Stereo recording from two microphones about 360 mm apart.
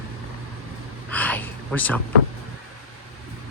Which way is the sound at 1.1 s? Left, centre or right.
Centre.